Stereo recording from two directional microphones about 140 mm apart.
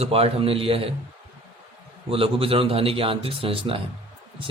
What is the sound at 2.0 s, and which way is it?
A man's voice, 40° right (ahead or behind).